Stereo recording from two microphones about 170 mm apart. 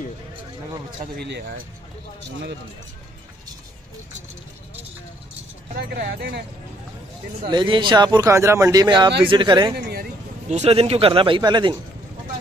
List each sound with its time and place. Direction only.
1.1 s speech: 75° right (ahead or behind)
5.9 s speech: 75° right (ahead or behind)
7.4 s speech: 30° right (ahead or behind)
10.5 s a man's voice: 40° right (ahead or behind)